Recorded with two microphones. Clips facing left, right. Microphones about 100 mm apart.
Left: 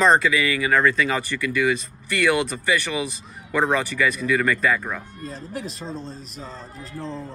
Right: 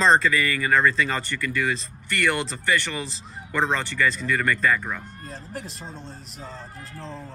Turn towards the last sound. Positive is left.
turn(degrees=15)  # may be behind; listen again after turning